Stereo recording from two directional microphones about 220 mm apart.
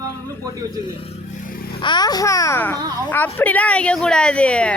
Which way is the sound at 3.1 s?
10° left (ahead or behind).